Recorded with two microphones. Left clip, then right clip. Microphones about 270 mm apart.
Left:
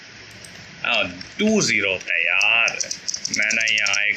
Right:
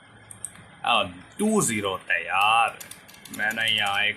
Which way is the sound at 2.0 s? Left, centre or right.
Right.